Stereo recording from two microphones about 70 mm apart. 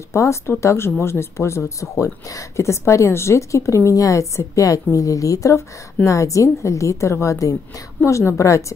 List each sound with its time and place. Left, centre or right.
0.1 s a woman's voice: left